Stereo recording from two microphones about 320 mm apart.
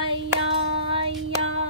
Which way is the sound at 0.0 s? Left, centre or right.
Centre.